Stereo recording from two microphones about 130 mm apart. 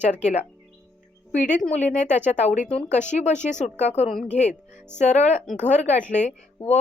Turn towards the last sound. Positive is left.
turn(degrees=65)  # may be behind; listen again after turning